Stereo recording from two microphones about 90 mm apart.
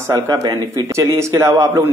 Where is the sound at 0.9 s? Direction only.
30° right (ahead or behind).